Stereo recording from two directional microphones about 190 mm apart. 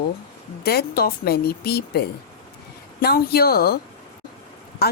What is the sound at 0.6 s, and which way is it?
A woman's voice, 55° left (ahead or behind).